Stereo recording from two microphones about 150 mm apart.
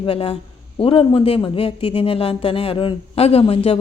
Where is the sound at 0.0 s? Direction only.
40° left (ahead or behind).